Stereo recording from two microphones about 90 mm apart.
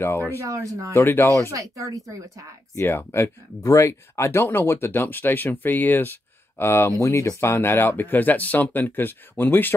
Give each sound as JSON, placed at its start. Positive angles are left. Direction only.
{"t": 0.0, "sound": "speech", "side_deg": 25}
{"t": 0.4, "sound": "speech", "side_deg": -35}
{"t": 0.9, "sound": "speech", "side_deg": 25}
{"t": 1.5, "sound": "speech", "side_deg": -40}
{"t": 2.7, "sound": "speech", "side_deg": 25}